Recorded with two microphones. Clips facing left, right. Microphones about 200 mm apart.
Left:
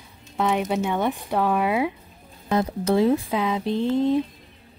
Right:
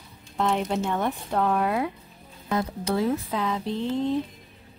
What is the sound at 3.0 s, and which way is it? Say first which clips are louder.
Speech: left 5 dB; 15° left (ahead or behind).